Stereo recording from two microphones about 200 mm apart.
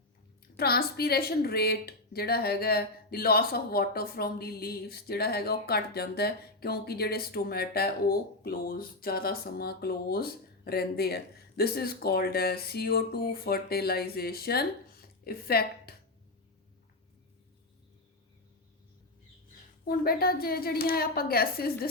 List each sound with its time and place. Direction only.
0.5 s a woman's voice: 50° left (ahead or behind)
15.9 s music: 50° left (ahead or behind)
19.8 s speech: 45° left (ahead or behind)